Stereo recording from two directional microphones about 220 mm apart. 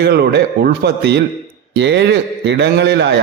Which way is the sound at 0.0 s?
45° right (ahead or behind).